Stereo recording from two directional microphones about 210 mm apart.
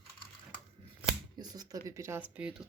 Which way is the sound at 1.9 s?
10° right (ahead or behind).